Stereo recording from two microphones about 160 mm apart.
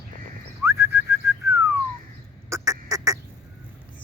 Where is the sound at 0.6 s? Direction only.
15° right (ahead or behind).